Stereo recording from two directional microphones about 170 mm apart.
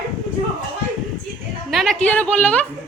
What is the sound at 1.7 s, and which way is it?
A woman's voice, centre (ahead or behind).